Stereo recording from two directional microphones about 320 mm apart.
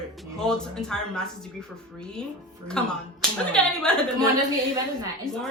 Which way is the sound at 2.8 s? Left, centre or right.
Centre.